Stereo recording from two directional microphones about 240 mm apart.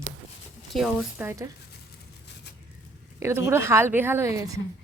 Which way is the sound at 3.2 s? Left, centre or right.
Centre.